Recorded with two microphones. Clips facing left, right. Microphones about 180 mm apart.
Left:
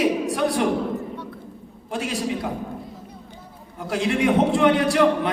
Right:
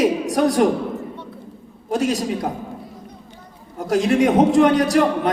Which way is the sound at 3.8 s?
40° right (ahead or behind).